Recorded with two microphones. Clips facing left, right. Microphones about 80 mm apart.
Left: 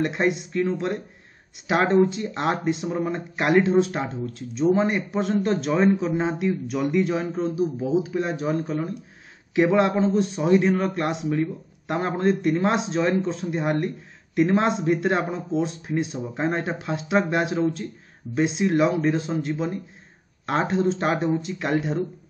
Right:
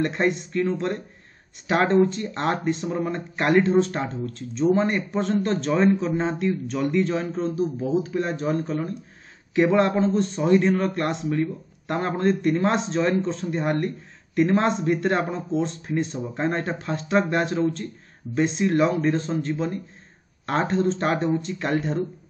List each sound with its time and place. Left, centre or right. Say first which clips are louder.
0.0 s a man's voice: even; centre